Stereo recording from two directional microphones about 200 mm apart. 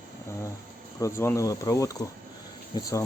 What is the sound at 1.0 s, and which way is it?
Speech, 15° left (ahead or behind).